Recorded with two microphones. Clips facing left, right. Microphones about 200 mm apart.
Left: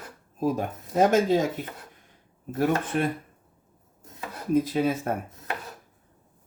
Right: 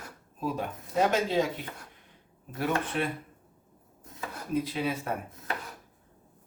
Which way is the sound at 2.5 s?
45° left (ahead or behind).